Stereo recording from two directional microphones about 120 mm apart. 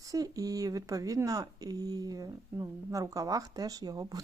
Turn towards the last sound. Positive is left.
turn(degrees=-30)  # may be behind; listen again after turning